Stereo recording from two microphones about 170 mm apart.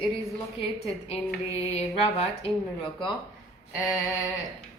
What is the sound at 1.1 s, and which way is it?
A man's voice, 35° left (ahead or behind).